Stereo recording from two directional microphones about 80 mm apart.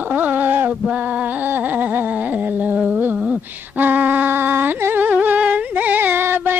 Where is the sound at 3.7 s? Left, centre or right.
Right.